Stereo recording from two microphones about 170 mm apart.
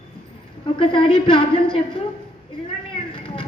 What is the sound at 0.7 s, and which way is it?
A woman's voice, 30° left (ahead or behind).